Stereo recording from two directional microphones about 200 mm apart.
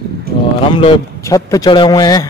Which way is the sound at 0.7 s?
25° left (ahead or behind).